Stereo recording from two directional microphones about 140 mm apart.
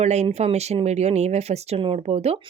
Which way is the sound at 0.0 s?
50° right (ahead or behind).